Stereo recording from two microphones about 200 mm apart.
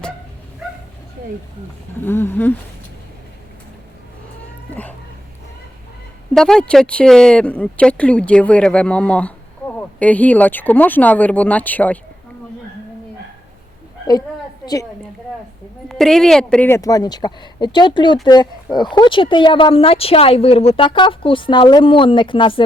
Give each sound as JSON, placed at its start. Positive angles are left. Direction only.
{"t": 2.0, "sound": "speech", "side_deg": 10}
{"t": 4.7, "sound": "dog", "side_deg": 10}
{"t": 6.3, "sound": "speech", "side_deg": 5}
{"t": 14.1, "sound": "a sound", "side_deg": 20}
{"t": 15.9, "sound": "speech", "side_deg": 0}